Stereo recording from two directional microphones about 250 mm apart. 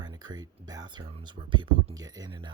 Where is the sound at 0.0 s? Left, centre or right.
Centre.